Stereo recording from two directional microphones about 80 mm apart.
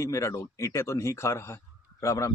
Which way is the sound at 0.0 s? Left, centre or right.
Left.